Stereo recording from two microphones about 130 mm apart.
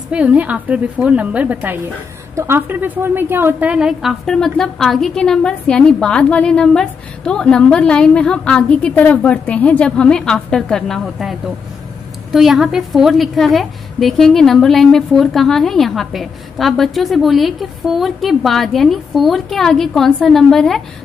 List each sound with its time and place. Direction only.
0.1 s a woman's voice: 10° right (ahead or behind)